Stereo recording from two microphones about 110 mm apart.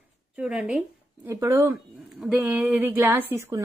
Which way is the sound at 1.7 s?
5° right (ahead or behind).